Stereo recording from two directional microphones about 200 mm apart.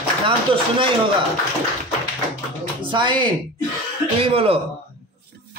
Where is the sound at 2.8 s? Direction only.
25° right (ahead or behind).